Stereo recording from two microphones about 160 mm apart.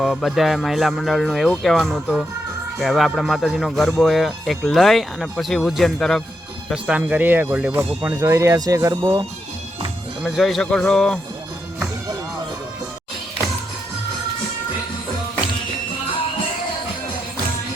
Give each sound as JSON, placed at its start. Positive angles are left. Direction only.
{"t": 0.0, "sound": "speech", "side_deg": 0}
{"t": 10.2, "sound": "speech", "side_deg": 0}